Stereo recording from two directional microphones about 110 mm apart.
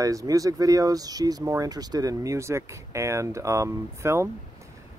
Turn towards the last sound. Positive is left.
turn(degrees=-25)  # may be behind; listen again after turning